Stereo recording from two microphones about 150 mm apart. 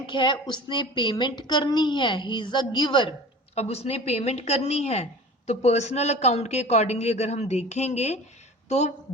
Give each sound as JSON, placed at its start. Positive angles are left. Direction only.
{"t": 0.0, "sound": "a woman's voice", "side_deg": 30}
{"t": 3.5, "sound": "a man's voice", "side_deg": 45}